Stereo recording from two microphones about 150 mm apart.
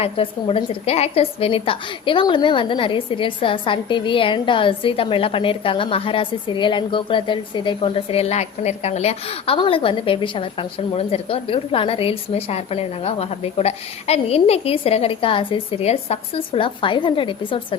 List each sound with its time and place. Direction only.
0.0 s a woman's voice: 35° left (ahead or behind)